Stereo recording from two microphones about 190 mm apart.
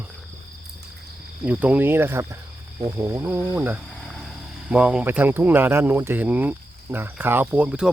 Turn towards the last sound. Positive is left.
turn(degrees=-5)  # may be behind; listen again after turning